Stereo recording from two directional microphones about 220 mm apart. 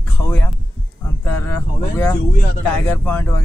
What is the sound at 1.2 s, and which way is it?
Speech, 10° left (ahead or behind).